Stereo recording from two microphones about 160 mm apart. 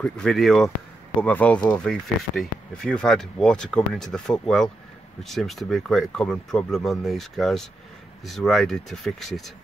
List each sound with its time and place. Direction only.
0.0 s speech: 5° left (ahead or behind)